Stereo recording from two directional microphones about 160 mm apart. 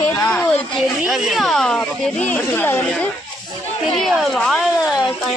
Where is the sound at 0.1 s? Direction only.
20° left (ahead or behind).